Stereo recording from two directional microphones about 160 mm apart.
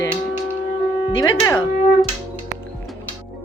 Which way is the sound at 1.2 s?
20° left (ahead or behind).